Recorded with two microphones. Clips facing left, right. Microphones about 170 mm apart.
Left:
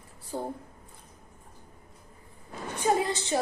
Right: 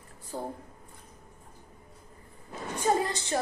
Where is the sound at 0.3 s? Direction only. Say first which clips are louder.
Left 2 dB; 15° left (ahead or behind).